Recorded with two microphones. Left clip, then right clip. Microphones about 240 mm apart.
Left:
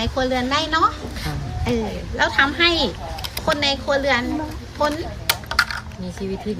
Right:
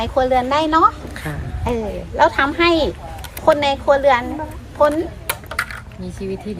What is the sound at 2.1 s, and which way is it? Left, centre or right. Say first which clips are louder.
Speech: right 3 dB; right.